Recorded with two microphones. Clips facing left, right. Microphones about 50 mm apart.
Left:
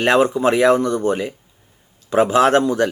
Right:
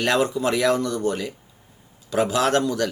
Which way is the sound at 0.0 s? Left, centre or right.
Left.